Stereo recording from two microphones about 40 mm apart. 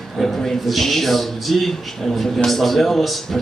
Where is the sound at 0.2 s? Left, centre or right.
Centre.